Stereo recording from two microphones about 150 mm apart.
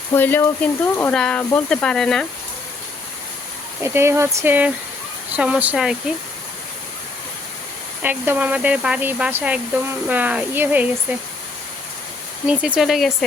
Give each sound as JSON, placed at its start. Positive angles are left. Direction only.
{"t": 0.1, "sound": "speech", "side_deg": 15}
{"t": 3.8, "sound": "speech", "side_deg": -15}
{"t": 8.0, "sound": "speech", "side_deg": -10}
{"t": 12.5, "sound": "speech", "side_deg": -5}